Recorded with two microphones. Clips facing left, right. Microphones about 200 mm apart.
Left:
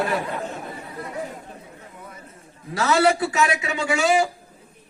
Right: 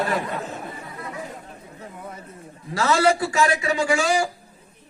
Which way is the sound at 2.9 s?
5° left (ahead or behind).